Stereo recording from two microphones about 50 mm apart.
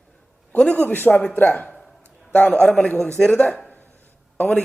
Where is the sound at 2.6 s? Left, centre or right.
Left.